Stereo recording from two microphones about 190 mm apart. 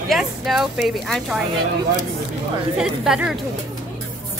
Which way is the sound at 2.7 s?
5° right (ahead or behind).